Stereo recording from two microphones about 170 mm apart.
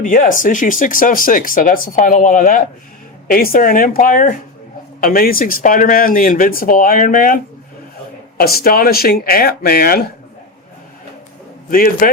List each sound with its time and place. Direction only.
0.0 s speech: 50° left (ahead or behind)
8.4 s speech: 60° left (ahead or behind)
11.7 s speech: 55° left (ahead or behind)